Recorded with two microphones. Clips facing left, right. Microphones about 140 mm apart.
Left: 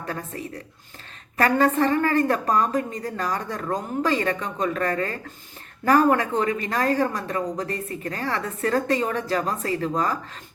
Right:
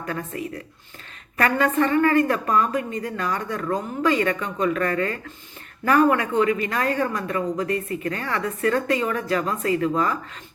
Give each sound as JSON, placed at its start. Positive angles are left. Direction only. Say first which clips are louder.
{"t": 1.4, "sound": "a woman's voice", "louder": "left 1 dB", "side_deg": 35}